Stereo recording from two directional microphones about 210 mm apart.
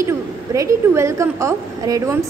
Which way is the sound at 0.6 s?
15° right (ahead or behind).